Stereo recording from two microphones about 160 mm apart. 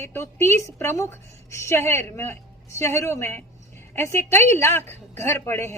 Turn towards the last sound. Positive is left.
turn(degrees=15)  # may be behind; listen again after turning